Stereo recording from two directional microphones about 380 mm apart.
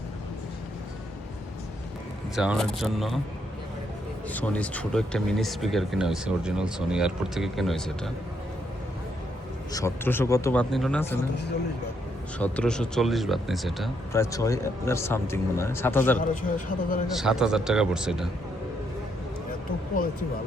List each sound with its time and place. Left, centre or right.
2.3 s speech: centre
4.3 s speech: centre
9.7 s speech: centre
12.4 s speech: centre
16.2 s speech: centre
17.2 s speech: centre